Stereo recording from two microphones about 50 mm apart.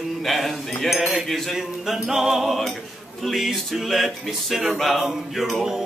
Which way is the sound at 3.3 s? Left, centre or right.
Centre.